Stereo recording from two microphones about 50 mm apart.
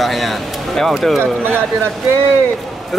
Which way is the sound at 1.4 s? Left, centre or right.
Right.